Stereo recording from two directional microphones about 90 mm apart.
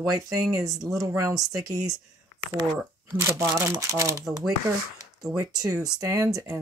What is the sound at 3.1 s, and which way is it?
Speech, 30° right (ahead or behind).